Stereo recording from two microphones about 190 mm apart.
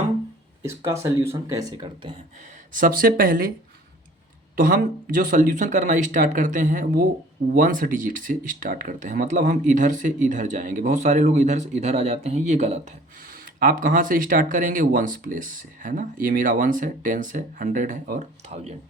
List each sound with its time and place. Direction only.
0.6 s speech: 15° right (ahead or behind)
2.7 s speech: 50° right (ahead or behind)
4.5 s speech: 50° right (ahead or behind)